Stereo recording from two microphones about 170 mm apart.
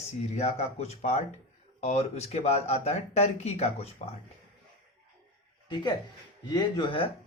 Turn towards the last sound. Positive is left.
turn(degrees=30)  # may be behind; listen again after turning